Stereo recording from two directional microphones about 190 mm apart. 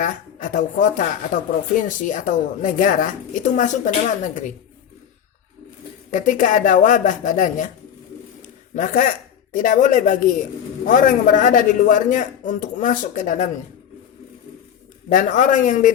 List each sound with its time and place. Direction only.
0.0 s speech: 45° left (ahead or behind)
6.1 s speech: 40° left (ahead or behind)
8.4 s a sound: 40° left (ahead or behind)
9.5 s speech: 45° left (ahead or behind)
15.1 s speech: 40° left (ahead or behind)